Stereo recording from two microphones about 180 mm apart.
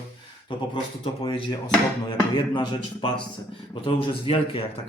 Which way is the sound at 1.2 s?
25° left (ahead or behind).